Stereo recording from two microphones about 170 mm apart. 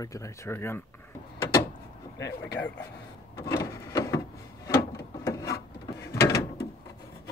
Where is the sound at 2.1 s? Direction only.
20° left (ahead or behind).